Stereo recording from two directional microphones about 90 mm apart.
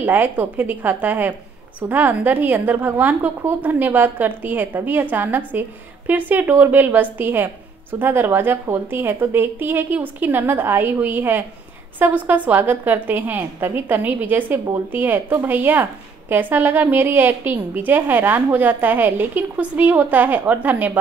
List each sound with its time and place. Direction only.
0.0 s a woman's voice: 20° right (ahead or behind)